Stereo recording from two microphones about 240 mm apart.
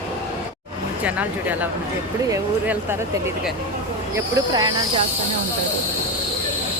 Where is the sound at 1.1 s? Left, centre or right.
Centre.